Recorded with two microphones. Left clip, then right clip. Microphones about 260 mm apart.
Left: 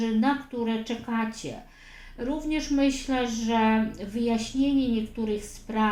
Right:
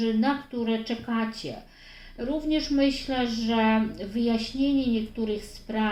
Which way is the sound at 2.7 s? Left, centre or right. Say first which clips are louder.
Left 2 dB; left.